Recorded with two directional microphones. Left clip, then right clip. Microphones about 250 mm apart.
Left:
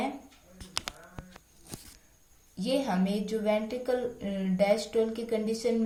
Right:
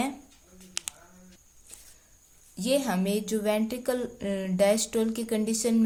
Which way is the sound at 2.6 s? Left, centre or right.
Right.